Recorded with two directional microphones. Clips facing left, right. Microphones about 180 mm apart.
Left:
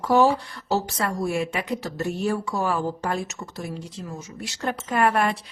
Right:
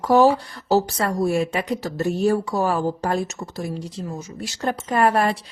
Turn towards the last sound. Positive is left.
turn(degrees=-35)  # may be behind; listen again after turning